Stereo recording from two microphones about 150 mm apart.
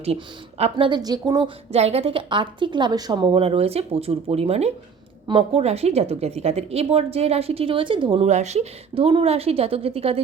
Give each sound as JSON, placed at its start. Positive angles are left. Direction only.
{"t": 0.6, "sound": "a woman's voice", "side_deg": -35}
{"t": 1.7, "sound": "a woman's voice", "side_deg": -45}
{"t": 8.3, "sound": "a woman's voice", "side_deg": -50}